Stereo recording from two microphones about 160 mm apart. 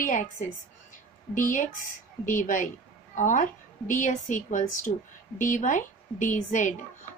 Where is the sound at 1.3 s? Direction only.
55° left (ahead or behind).